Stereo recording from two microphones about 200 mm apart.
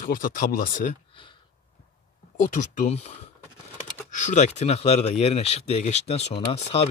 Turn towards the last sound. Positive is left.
turn(degrees=30)  # may be behind; listen again after turning